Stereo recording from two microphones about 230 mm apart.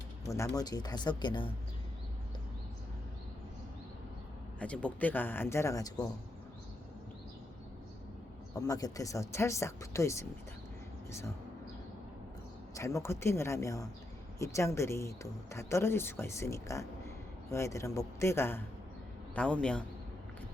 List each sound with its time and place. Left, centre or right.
0.3 s speech: centre
4.6 s speech: centre
8.5 s speech: centre
12.7 s a man's voice: centre